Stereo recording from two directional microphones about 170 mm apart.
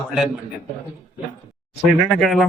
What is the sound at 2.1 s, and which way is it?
Speech, centre (ahead or behind).